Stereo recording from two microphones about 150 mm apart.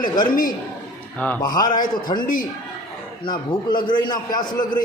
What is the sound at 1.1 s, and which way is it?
Speech, 10° left (ahead or behind).